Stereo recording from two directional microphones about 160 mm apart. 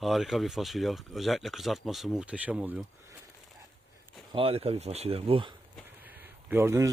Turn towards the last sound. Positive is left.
turn(degrees=-15)  # may be behind; listen again after turning